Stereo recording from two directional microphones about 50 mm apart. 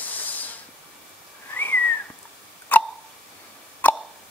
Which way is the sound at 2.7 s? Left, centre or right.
Left.